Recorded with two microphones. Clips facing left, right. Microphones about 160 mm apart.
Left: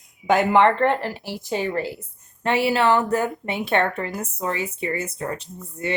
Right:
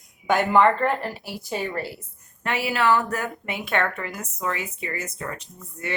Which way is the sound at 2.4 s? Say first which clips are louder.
Left 4 dB; 30° left (ahead or behind).